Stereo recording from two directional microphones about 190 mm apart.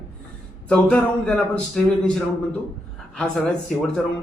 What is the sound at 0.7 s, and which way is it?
Speech, 5° left (ahead or behind).